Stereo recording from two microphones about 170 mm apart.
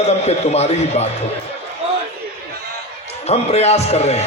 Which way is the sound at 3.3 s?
40° left (ahead or behind).